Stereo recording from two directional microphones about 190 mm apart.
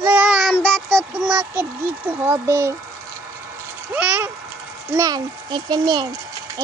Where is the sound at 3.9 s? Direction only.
10° right (ahead or behind).